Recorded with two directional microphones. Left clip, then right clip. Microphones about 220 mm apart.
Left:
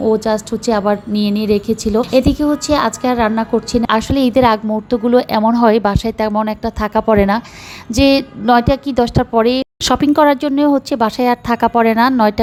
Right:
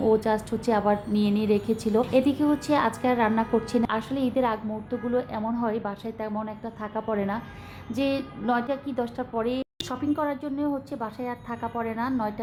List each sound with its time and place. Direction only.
0.0 s a woman's voice: 20° left (ahead or behind)
3.8 s a woman's voice: 35° left (ahead or behind)